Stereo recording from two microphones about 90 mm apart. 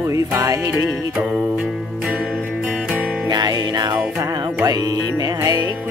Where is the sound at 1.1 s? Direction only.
5° right (ahead or behind).